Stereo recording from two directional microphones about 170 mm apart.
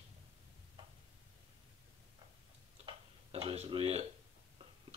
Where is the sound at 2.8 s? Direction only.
35° right (ahead or behind).